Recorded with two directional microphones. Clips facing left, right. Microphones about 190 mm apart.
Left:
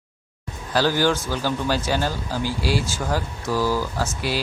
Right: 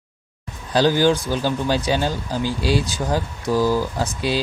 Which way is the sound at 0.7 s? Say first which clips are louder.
Right 4 dB; 15° right (ahead or behind).